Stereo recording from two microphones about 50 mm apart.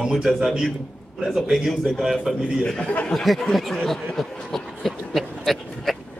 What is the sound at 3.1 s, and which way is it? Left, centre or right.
Speech, centre.